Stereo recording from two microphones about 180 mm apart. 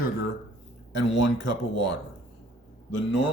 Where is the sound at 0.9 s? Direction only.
90° left.